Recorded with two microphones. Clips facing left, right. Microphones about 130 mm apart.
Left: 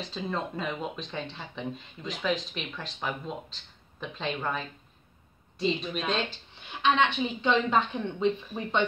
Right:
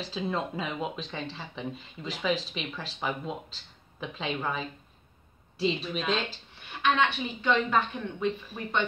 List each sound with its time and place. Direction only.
0.0 s speech: 5° right (ahead or behind)
6.8 s speech: 20° left (ahead or behind)